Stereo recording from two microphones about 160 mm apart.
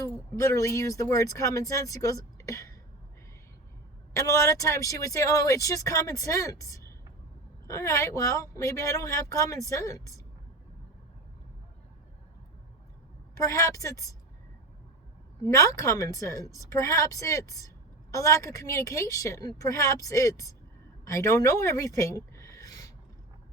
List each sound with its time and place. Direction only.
0.0 s speech: 20° left (ahead or behind)
4.2 s speech: 20° left (ahead or behind)
13.3 s speech: 20° left (ahead or behind)
15.4 s speech: 20° left (ahead or behind)